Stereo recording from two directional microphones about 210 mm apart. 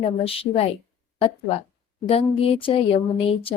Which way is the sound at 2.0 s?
25° left (ahead or behind).